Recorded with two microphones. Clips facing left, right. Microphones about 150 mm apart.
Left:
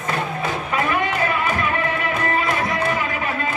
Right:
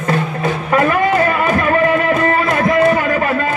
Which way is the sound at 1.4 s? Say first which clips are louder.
Right 7 dB; 60° right (ahead or behind).